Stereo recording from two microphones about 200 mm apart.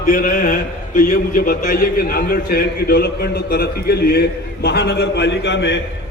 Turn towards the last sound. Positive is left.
turn(degrees=60)  # may be behind; listen again after turning